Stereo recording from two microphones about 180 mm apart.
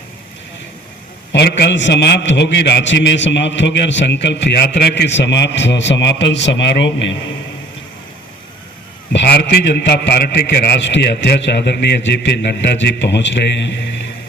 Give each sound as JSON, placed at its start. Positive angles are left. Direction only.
{"t": 1.3, "sound": "a man's voice", "side_deg": 65}
{"t": 9.1, "sound": "a man's voice", "side_deg": 70}